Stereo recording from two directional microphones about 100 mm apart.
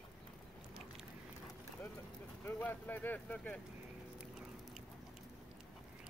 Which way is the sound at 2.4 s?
20° left (ahead or behind).